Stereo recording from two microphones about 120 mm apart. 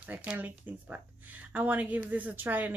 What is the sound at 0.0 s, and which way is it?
Speech, 10° right (ahead or behind).